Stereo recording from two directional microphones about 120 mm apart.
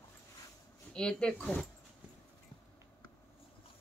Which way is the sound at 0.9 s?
5° left (ahead or behind).